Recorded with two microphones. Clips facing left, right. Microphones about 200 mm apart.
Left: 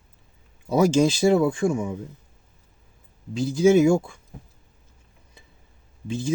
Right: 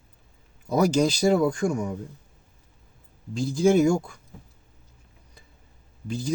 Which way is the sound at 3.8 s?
5° left (ahead or behind).